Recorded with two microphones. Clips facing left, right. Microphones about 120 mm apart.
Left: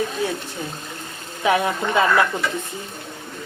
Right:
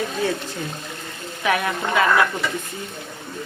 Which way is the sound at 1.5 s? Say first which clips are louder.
Left 2 dB; 25° left (ahead or behind).